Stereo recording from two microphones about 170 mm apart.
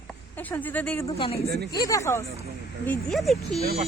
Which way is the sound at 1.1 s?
35° left (ahead or behind).